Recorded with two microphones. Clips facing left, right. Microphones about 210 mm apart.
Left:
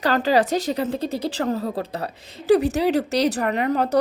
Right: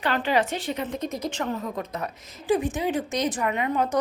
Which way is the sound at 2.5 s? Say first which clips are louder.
Left 6 dB; 70° left (ahead or behind).